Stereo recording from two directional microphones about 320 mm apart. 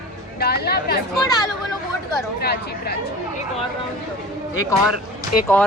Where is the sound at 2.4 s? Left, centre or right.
Left.